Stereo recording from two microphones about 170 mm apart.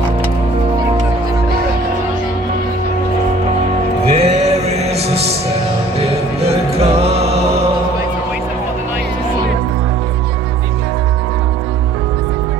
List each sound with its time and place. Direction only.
4.0 s music: 40° right (ahead or behind)